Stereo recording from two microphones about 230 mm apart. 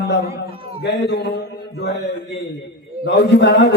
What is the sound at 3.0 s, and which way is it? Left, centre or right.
Speech, left.